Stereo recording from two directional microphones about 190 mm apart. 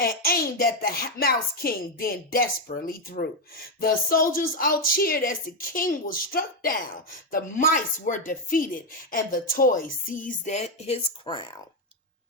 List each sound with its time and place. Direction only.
0.0 s a woman's voice: 50° left (ahead or behind); by 11.6 s 25° left (ahead or behind)